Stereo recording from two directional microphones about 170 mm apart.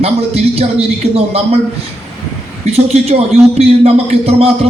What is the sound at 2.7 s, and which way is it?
A man's voice, 35° right (ahead or behind).